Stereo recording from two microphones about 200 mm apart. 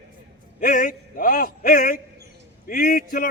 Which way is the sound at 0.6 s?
45° left (ahead or behind).